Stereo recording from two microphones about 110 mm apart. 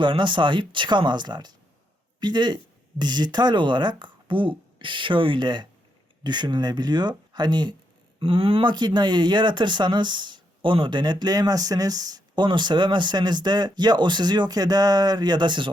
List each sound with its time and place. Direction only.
0.0 s speech: 45° right (ahead or behind)
8.2 s speech: 55° right (ahead or behind)